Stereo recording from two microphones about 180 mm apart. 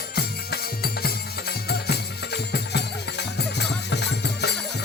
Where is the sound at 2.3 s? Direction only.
70° left (ahead or behind).